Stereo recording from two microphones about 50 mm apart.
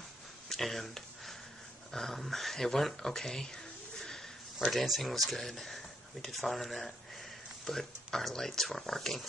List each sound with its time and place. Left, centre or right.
0.5 s a sound: centre
1.9 s speech: centre
4.6 s speech: centre